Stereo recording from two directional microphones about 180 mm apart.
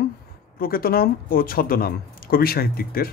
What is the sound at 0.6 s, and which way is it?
Speech, 55° left (ahead or behind).